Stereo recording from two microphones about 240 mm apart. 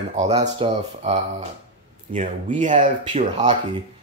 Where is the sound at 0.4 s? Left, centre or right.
Right.